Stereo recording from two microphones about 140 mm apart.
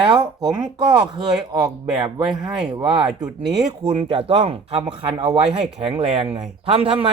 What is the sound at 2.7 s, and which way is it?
Speech, 35° right (ahead or behind).